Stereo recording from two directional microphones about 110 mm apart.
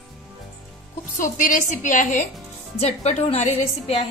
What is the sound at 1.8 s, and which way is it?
Speech, 90° left.